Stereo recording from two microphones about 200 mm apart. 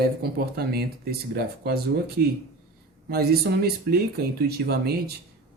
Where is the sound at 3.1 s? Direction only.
50° right (ahead or behind).